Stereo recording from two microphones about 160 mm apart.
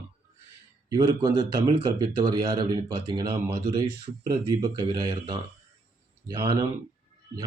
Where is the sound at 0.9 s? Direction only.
25° right (ahead or behind).